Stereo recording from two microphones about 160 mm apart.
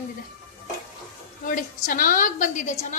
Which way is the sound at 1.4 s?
60° left (ahead or behind).